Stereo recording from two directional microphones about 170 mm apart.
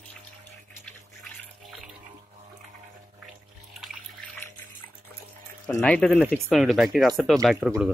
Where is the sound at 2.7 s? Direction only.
45° right (ahead or behind).